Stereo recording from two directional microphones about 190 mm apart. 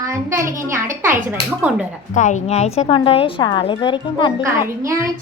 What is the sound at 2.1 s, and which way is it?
A woman's voice, 40° left (ahead or behind).